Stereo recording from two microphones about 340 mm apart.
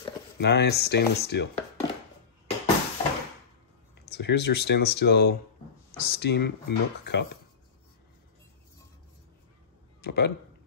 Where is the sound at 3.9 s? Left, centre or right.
Left.